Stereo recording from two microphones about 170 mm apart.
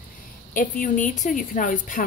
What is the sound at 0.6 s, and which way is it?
Speech, 50° left (ahead or behind).